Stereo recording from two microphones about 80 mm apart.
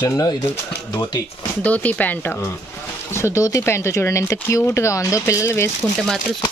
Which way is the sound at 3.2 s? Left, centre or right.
Left.